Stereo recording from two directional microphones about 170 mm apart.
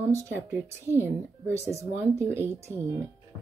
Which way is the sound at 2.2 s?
10° left (ahead or behind).